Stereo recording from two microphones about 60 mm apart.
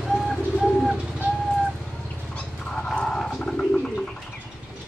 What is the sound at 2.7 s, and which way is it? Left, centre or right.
Bird, centre.